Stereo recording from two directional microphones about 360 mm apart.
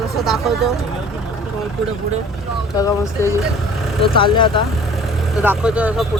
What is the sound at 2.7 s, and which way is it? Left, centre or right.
Speech, centre.